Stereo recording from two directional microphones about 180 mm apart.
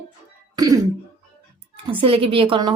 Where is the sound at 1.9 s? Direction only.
30° right (ahead or behind).